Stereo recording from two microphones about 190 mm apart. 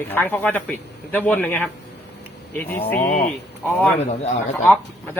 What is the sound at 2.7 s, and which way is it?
Speech, 10° left (ahead or behind).